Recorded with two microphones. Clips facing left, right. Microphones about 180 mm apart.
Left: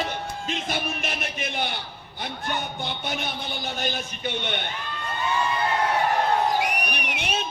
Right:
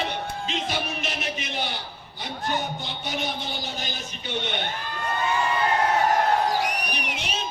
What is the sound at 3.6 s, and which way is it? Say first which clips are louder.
Speech: left 4 dB; 55° left (ahead or behind).